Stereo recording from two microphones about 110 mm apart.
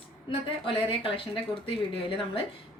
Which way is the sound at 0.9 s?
55° left (ahead or behind).